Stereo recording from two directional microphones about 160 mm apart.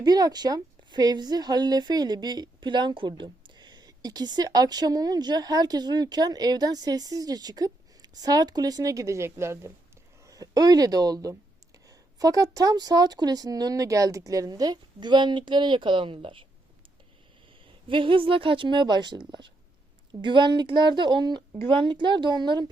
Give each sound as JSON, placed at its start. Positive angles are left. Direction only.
{"t": 0.0, "sound": "a woman's voice", "side_deg": -25}
{"t": 17.8, "sound": "a woman's voice", "side_deg": -30}
{"t": 20.2, "sound": "a woman's voice", "side_deg": -30}